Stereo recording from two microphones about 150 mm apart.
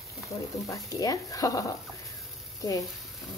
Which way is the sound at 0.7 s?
25° left (ahead or behind).